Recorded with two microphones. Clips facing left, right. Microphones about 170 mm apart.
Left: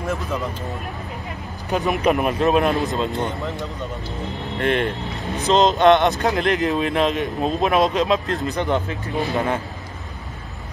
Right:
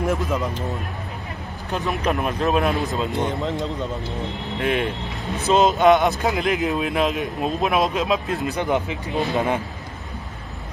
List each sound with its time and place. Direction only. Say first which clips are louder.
0.0 s speech: right 3 dB; 20° right (ahead or behind)
1.7 s speech: left 4 dB; 5° left (ahead or behind)
4.6 s speech: left 2 dB; 5° right (ahead or behind)